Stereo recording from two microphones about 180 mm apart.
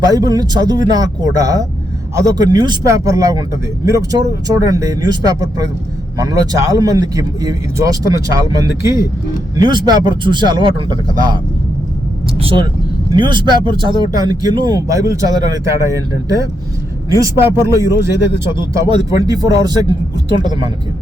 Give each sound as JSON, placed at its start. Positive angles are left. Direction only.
{"t": 0.0, "sound": "speech", "side_deg": -20}
{"t": 12.4, "sound": "speech", "side_deg": -30}